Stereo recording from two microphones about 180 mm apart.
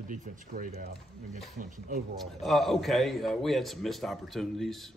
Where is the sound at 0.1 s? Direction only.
45° right (ahead or behind).